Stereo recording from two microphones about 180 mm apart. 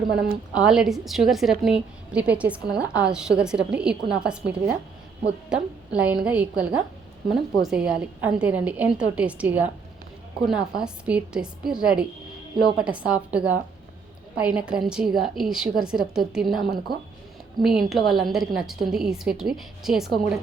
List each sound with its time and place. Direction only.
0.5 s a woman's voice: 5° right (ahead or behind)
17.6 s a woman's voice: centre (ahead or behind)